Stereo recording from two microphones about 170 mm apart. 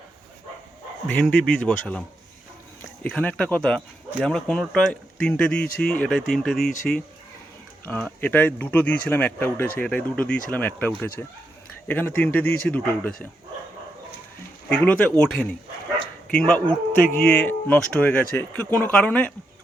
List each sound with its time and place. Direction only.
1.0 s speech: 10° left (ahead or behind)
7.9 s speech: 10° left (ahead or behind)
14.7 s speech: 5° left (ahead or behind)
17.1 s speech: 55° left (ahead or behind)
17.3 s speech: 10° left (ahead or behind)